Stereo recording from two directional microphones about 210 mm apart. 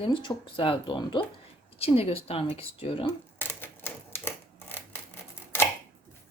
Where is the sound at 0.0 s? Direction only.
25° left (ahead or behind).